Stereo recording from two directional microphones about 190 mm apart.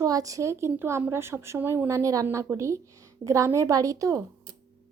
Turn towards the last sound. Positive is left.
turn(degrees=-15)  # may be behind; listen again after turning